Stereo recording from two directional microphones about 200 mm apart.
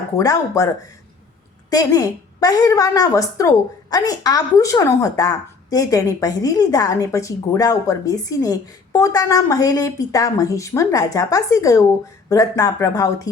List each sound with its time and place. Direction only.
0.2 s a woman's voice: 15° left (ahead or behind)
1.7 s a woman's voice: 15° left (ahead or behind)